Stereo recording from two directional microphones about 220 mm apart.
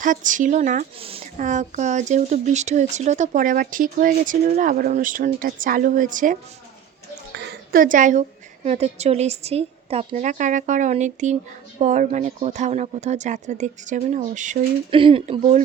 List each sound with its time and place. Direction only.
0.0 s speech: 35° right (ahead or behind)
7.3 s a sound: 40° right (ahead or behind)
8.6 s a woman's voice: 30° right (ahead or behind)
14.9 s a woman's voice: 25° right (ahead or behind)